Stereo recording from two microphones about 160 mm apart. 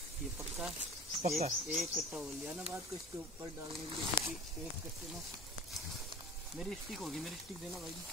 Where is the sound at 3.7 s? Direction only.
35° right (ahead or behind).